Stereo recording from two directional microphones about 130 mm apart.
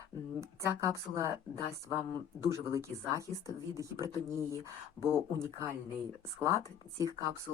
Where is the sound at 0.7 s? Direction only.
25° right (ahead or behind).